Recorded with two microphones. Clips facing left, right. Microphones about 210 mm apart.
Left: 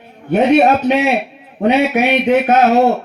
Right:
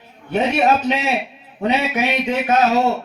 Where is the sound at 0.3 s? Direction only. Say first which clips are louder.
Left 6 dB; 60° left (ahead or behind).